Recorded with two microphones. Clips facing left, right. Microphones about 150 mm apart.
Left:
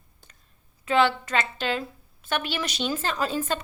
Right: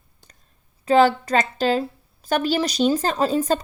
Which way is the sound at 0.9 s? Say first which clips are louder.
Right 6 dB; 40° right (ahead or behind).